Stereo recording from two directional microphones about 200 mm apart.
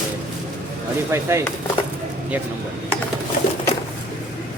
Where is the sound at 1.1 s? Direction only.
15° right (ahead or behind).